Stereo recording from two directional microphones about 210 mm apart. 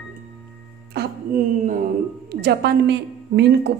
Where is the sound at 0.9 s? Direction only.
45° right (ahead or behind).